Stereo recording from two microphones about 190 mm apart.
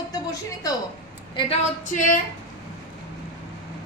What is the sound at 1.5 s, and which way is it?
Female singing, 45° left (ahead or behind).